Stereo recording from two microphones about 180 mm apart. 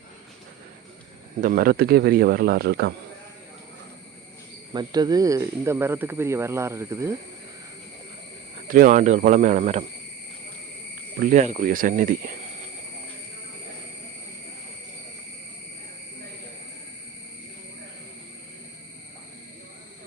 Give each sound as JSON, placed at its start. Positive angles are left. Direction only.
{"t": 1.4, "sound": "speech", "side_deg": -50}
{"t": 4.7, "sound": "speech", "side_deg": -25}
{"t": 8.5, "sound": "speech", "side_deg": -50}
{"t": 11.2, "sound": "speech", "side_deg": -45}